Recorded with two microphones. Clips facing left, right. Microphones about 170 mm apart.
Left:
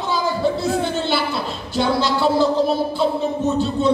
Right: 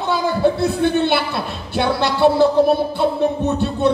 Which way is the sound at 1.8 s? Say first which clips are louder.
Right 3 dB; 60° right (ahead or behind).